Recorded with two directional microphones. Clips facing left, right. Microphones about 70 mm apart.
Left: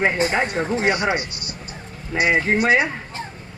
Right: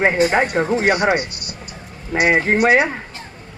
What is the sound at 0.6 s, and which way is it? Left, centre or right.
Speech, right.